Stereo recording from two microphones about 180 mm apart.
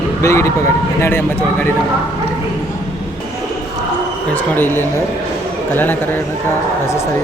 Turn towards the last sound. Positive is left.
turn(degrees=10)  # may be behind; listen again after turning